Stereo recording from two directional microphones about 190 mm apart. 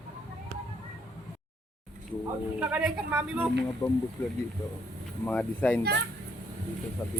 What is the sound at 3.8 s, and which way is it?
Speech, 15° left (ahead or behind).